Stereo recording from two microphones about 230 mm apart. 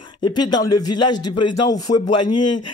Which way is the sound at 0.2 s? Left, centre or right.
Centre.